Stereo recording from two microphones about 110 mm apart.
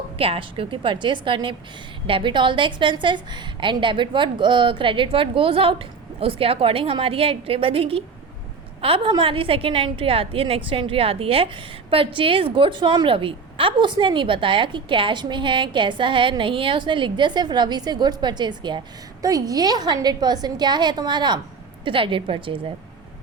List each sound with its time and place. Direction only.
0.2 s a woman's voice: 55° right (ahead or behind)